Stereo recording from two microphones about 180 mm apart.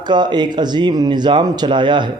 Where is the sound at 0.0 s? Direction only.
25° right (ahead or behind).